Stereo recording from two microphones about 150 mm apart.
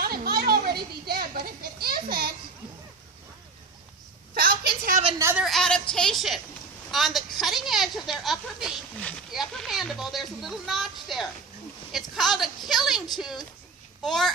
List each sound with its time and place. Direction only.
0.0 s children playing: 90° right
4.4 s a sound: 75° right (ahead or behind)
5.4 s speech: centre (ahead or behind)